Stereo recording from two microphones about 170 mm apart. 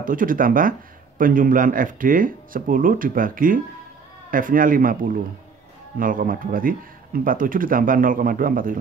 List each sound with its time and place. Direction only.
0.0 s speech: 55° right (ahead or behind)